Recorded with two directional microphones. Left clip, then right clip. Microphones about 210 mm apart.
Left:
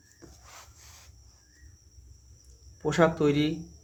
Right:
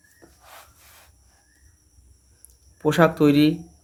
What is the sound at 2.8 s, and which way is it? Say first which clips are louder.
Speech: right 6 dB; 30° right (ahead or behind).